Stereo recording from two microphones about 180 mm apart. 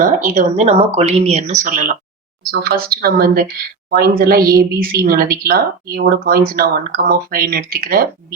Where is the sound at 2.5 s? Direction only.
60° right (ahead or behind).